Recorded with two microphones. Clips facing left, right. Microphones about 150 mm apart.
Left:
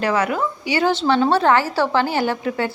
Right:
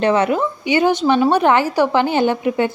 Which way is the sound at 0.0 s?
25° right (ahead or behind).